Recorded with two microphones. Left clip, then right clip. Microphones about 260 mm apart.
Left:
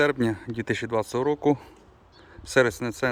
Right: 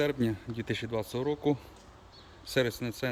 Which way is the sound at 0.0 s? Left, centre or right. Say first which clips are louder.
Left 7 dB; centre.